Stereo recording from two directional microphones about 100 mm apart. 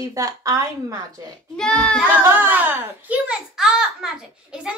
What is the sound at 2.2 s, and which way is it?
A child's voice, 20° right (ahead or behind).